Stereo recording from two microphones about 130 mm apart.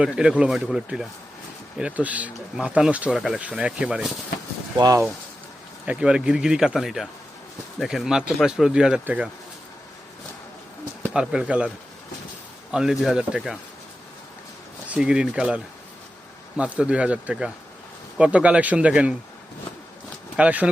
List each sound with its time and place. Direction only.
0.0 s speech: 5° right (ahead or behind)
4.8 s speech: 25° right (ahead or behind)
5.8 s speech: 10° right (ahead or behind)
11.1 s speech: 5° right (ahead or behind)
12.7 s speech: 5° right (ahead or behind)
14.8 s speech: 10° right (ahead or behind)
20.3 s speech: 10° right (ahead or behind)